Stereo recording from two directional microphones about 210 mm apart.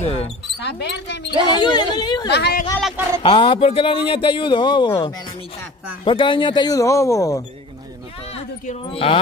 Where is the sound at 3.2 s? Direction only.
25° left (ahead or behind).